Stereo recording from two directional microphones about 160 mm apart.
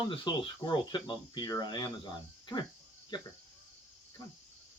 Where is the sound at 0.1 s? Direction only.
30° left (ahead or behind).